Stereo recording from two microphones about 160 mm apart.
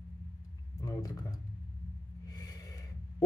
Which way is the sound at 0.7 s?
20° left (ahead or behind).